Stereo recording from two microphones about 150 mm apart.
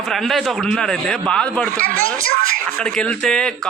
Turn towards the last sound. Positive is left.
turn(degrees=5)  # may be behind; listen again after turning